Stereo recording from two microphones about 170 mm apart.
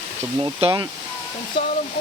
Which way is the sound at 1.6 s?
30° left (ahead or behind).